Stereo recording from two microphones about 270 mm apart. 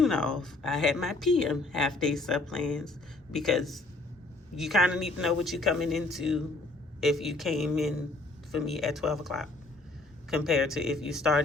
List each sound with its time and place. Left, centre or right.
0.0 s speech: centre